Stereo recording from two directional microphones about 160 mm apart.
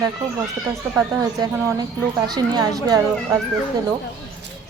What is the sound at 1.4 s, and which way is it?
A woman's voice, 20° right (ahead or behind).